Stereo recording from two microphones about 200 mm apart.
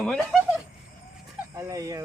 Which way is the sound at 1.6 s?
15° right (ahead or behind).